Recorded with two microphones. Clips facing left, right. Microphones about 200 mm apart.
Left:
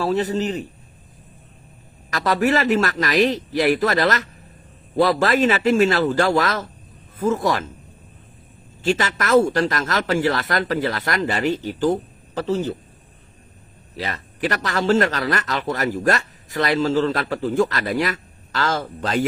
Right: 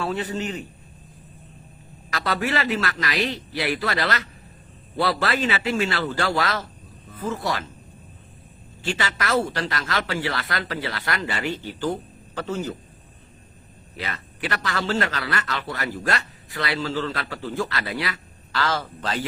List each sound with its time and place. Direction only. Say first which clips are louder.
0.0 s a man's voice: left 6 dB; 40° left (ahead or behind)
2.1 s a man's voice: left 6 dB; 45° left (ahead or behind)
8.8 s a man's voice: left 6 dB; 45° left (ahead or behind)
13.9 s a man's voice: left 4 dB; 40° left (ahead or behind)